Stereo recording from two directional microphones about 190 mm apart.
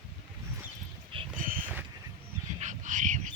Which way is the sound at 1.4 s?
45° right (ahead or behind).